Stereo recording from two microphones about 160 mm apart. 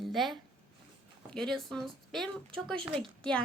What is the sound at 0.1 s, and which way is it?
A woman's voice, centre (ahead or behind).